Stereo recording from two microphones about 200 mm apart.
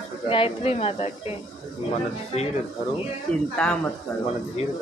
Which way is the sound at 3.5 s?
5° left (ahead or behind).